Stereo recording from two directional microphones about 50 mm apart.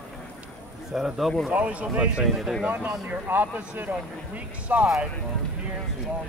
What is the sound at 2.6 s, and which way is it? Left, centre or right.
Speech, right.